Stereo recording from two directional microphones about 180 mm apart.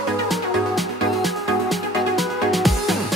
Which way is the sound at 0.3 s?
Centre (ahead or behind).